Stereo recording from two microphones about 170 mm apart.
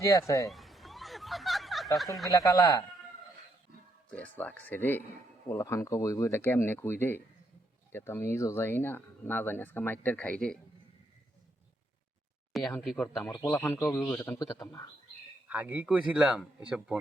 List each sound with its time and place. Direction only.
0.0 s speech: 20° left (ahead or behind)
0.4 s a sound: centre (ahead or behind)
2.3 s speech: 20° left (ahead or behind)
4.1 s speech: 10° left (ahead or behind)
12.5 s speech: centre (ahead or behind)
13.3 s speech: 15° left (ahead or behind)
15.4 s a man's voice: 10° right (ahead or behind)